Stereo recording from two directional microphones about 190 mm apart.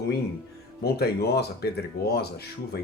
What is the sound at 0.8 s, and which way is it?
Speech, 55° left (ahead or behind).